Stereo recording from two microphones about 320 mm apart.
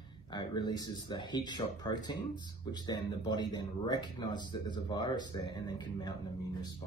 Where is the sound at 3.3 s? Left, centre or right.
Centre.